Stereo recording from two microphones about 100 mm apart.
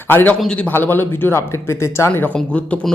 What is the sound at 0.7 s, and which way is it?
Speech, 20° left (ahead or behind).